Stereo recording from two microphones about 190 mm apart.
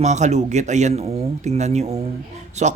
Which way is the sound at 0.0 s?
35° right (ahead or behind).